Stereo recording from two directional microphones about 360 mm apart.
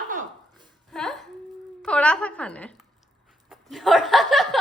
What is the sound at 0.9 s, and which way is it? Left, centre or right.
A woman's voice, centre.